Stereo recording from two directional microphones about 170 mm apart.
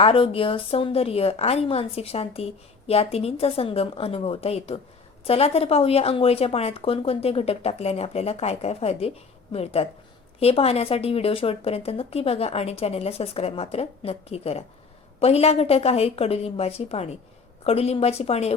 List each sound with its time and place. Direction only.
0.0 s a woman's voice: 35° left (ahead or behind)